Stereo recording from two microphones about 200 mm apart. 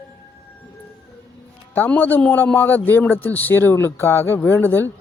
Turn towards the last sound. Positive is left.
turn(degrees=10)  # may be behind; listen again after turning